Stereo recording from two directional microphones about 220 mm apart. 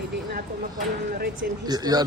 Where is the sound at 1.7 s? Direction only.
20° right (ahead or behind).